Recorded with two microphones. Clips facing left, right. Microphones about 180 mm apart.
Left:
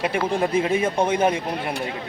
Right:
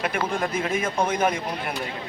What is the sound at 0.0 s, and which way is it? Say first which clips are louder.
Speech: left 4 dB; 25° left (ahead or behind).